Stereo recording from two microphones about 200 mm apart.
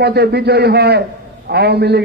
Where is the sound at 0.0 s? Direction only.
55° right (ahead or behind).